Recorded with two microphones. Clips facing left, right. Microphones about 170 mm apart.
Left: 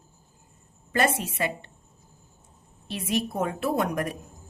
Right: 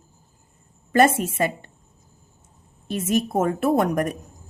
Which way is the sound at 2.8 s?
45° right (ahead or behind).